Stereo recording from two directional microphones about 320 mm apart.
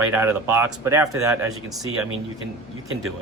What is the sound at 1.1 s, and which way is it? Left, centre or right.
A man's voice, right.